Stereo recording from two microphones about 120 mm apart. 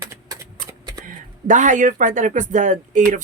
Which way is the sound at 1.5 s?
90° right.